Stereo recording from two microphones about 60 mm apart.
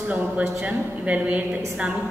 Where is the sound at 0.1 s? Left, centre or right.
Right.